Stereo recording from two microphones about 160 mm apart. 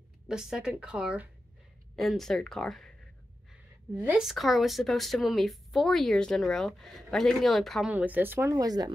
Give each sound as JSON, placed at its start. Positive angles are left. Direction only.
{"t": 0.3, "sound": "speech", "side_deg": -5}
{"t": 3.9, "sound": "speech", "side_deg": -10}
{"t": 7.9, "sound": "speech", "side_deg": -10}